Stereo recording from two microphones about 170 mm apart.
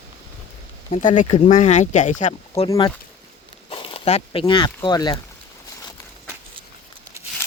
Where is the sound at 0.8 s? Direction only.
45° left (ahead or behind).